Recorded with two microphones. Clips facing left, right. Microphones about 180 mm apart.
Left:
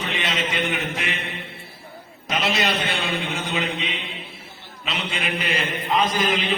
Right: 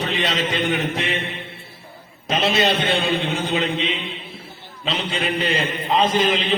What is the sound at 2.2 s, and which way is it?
A man's voice, 25° right (ahead or behind).